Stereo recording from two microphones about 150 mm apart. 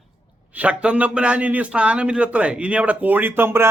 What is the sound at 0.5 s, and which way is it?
A man's voice, 10° right (ahead or behind).